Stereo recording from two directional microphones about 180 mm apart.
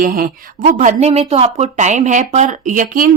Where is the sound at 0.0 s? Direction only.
55° right (ahead or behind).